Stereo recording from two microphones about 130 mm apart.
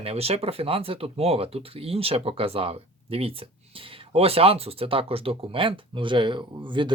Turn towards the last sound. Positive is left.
turn(degrees=-40)  # may be behind; listen again after turning